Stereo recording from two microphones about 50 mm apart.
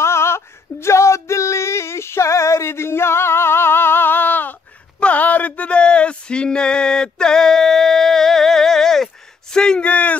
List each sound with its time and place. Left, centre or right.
0.0 s female singing: left
5.0 s male singing: left; by 9.8 s centre
9.8 s a sound: left